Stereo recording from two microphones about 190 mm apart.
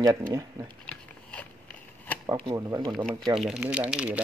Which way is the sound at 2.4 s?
20° right (ahead or behind).